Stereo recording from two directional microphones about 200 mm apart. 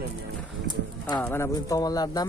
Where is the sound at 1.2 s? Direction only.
10° left (ahead or behind).